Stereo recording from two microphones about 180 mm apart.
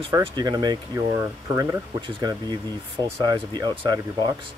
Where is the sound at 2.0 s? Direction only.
25° right (ahead or behind).